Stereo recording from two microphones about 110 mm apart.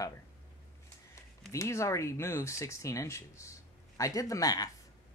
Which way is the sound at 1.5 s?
25° left (ahead or behind).